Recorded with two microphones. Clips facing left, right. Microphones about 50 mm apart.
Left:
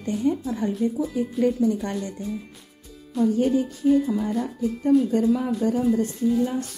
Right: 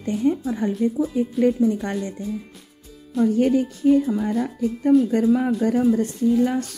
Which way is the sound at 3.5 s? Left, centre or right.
Right.